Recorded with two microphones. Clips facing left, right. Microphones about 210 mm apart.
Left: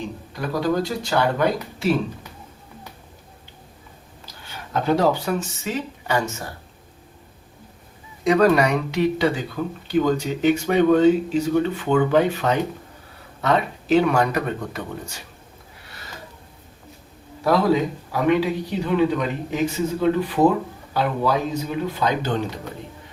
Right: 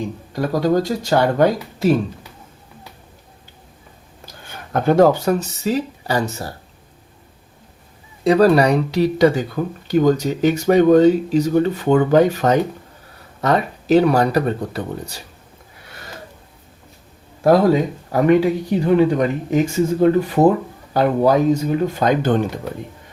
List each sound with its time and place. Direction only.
0.3 s a man's voice: 45° right (ahead or behind)
4.4 s speech: 50° right (ahead or behind); by 6.5 s 35° right (ahead or behind)
8.2 s speech: 35° right (ahead or behind)
18.1 s a man's voice: 45° right (ahead or behind)